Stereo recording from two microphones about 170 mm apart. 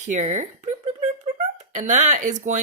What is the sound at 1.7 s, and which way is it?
Speech, 45° right (ahead or behind).